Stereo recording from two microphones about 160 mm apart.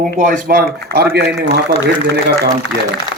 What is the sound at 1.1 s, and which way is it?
Speech, 90° right.